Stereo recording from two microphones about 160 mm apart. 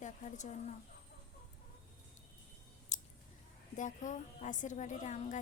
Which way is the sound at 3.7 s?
50° left (ahead or behind).